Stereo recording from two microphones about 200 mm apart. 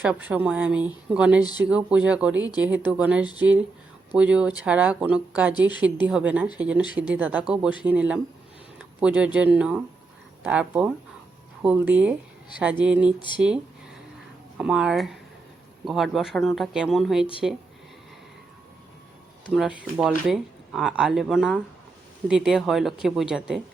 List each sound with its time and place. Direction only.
0.1 s speech: 10° right (ahead or behind)
13.1 s speech: 25° left (ahead or behind)
14.6 s speech: 5° right (ahead or behind)
19.5 s speech: 5° right (ahead or behind)